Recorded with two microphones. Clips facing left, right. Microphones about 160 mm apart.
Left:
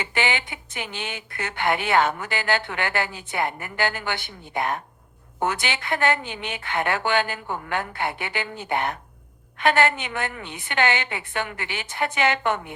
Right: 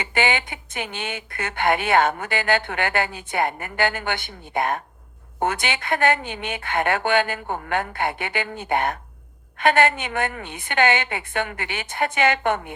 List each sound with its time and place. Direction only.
0.1 s speech: 50° right (ahead or behind)